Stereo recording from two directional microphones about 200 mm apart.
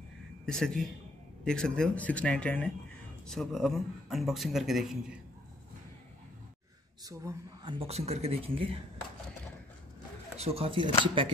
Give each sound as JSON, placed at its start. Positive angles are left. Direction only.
{"t": 0.5, "sound": "speech", "side_deg": 5}
{"t": 7.1, "sound": "speech", "side_deg": -15}
{"t": 10.4, "sound": "speech", "side_deg": -30}